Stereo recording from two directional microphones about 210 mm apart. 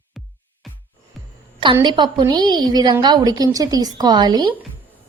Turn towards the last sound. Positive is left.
turn(degrees=-20)  # may be behind; listen again after turning